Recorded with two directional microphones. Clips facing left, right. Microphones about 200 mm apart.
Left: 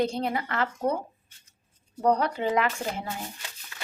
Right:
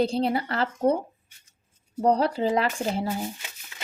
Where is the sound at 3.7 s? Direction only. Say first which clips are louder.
Left 1 dB; 20° right (ahead or behind).